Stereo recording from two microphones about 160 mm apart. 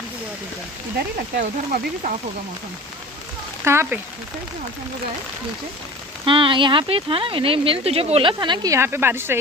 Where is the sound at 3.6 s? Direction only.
15° right (ahead or behind).